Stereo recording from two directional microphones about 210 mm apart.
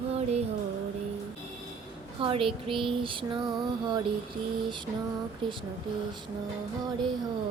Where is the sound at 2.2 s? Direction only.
25° right (ahead or behind).